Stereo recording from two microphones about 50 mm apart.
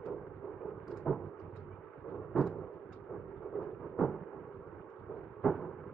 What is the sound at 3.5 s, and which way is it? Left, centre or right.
Thunder, centre.